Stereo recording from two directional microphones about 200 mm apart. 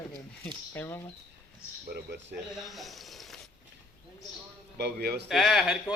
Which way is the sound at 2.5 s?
Centre (ahead or behind).